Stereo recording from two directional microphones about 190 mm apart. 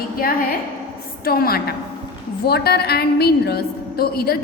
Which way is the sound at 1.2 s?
50° left (ahead or behind).